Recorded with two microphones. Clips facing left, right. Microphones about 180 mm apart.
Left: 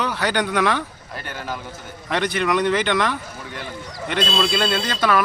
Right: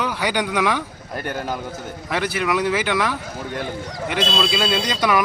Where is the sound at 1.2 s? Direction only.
45° right (ahead or behind).